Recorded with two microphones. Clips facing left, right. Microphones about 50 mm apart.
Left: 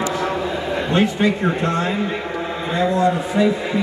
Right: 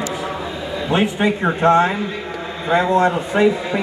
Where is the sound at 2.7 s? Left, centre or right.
Right.